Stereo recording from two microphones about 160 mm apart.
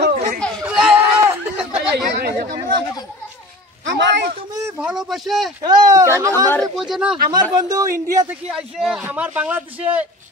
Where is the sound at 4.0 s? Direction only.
90° right.